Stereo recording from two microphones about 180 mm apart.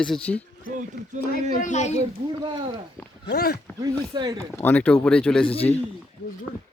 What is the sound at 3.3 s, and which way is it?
Speech, 60° left (ahead or behind).